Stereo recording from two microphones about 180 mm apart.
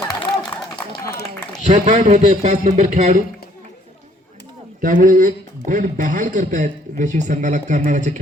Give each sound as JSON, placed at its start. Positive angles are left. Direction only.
{"t": 1.6, "sound": "speech", "side_deg": -40}
{"t": 4.8, "sound": "a man's voice", "side_deg": -50}